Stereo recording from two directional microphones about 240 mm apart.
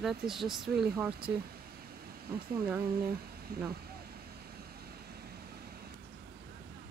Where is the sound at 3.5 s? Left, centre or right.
Right.